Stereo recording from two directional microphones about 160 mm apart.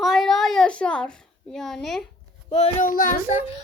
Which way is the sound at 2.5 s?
45° left (ahead or behind).